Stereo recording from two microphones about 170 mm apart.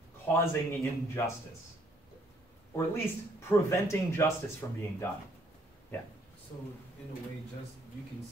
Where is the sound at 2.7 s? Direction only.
15° left (ahead or behind).